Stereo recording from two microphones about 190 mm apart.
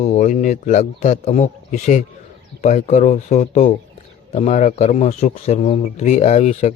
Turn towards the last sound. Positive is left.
turn(degrees=35)  # may be behind; listen again after turning